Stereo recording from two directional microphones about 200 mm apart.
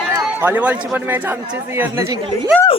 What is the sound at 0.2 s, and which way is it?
Speech, 5° right (ahead or behind).